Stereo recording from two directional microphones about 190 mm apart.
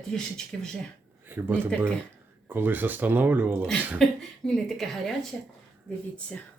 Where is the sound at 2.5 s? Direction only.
10° right (ahead or behind).